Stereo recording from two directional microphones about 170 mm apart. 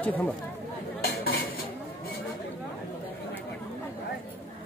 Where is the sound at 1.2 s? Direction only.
60° left (ahead or behind).